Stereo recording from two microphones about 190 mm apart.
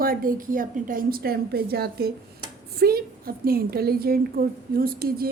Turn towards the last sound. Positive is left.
turn(degrees=-50)  # may be behind; listen again after turning